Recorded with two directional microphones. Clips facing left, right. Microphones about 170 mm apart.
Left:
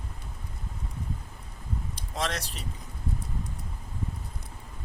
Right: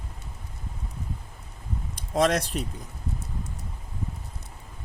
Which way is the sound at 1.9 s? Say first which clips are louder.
Right 11 dB; 50° right (ahead or behind).